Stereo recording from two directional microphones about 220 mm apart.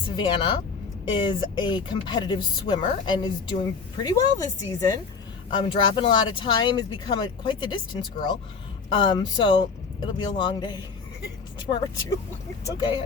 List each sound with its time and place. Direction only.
0.2 s speech: 20° left (ahead or behind)
8.9 s speech: 20° left (ahead or behind)